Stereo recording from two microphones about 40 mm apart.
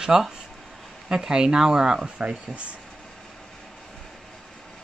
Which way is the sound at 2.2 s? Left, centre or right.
Right.